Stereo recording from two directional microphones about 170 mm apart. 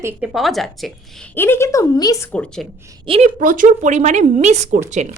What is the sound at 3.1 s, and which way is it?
A woman's voice, 45° right (ahead or behind).